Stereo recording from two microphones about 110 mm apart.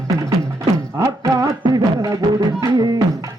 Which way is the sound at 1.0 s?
30° right (ahead or behind).